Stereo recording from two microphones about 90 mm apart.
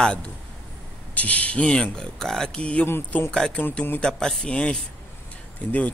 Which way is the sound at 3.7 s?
20° left (ahead or behind).